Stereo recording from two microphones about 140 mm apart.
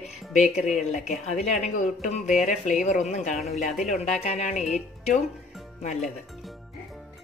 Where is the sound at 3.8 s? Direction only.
55° left (ahead or behind).